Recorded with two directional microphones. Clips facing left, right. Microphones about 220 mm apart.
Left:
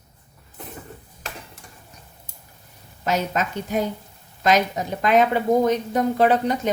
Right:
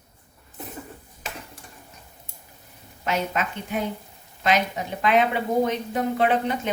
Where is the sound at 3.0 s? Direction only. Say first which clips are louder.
Left 3 dB; 40° left (ahead or behind).